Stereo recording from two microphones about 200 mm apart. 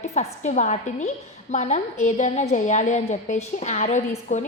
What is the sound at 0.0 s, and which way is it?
A woman's voice, 35° left (ahead or behind).